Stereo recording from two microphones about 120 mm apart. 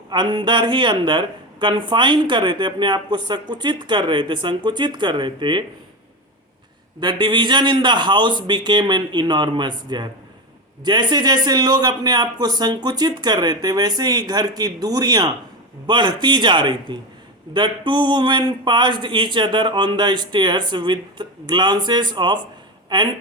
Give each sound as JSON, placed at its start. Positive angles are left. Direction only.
{"t": 0.1, "sound": "speech", "side_deg": -40}
{"t": 7.0, "sound": "speech", "side_deg": -40}